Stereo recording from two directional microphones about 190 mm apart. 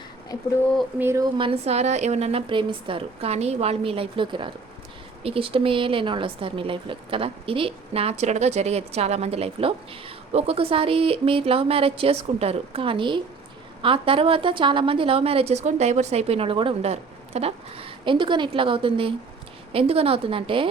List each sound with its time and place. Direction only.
0.9 s speech: 15° right (ahead or behind)
1.4 s a woman's voice: 30° right (ahead or behind)